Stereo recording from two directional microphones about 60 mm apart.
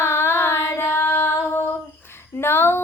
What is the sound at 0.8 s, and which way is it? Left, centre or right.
Music, left.